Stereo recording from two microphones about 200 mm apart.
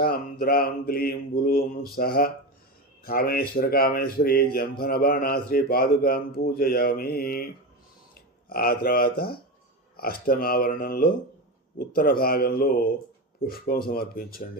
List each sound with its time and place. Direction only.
0.0 s a man's voice: 50° left (ahead or behind)